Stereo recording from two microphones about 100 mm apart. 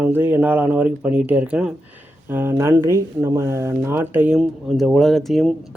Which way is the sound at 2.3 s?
25° right (ahead or behind).